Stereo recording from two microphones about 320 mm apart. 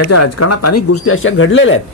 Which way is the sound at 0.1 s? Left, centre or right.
Left.